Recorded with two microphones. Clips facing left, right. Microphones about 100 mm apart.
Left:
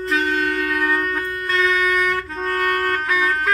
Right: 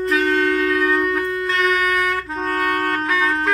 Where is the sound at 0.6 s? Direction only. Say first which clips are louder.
Right 3 dB; centre (ahead or behind).